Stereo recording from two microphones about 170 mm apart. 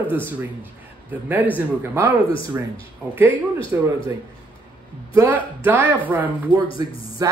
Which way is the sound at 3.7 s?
10° right (ahead or behind).